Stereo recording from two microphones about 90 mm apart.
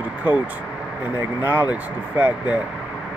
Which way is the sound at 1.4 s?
20° right (ahead or behind).